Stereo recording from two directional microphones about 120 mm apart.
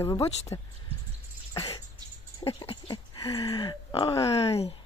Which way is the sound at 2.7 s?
50° left (ahead or behind).